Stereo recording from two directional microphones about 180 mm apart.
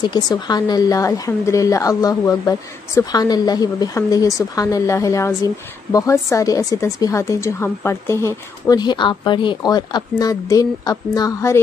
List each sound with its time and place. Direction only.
0.0 s speech: 25° left (ahead or behind)